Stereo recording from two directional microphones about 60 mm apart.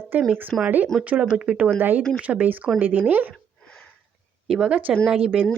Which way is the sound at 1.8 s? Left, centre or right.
Right.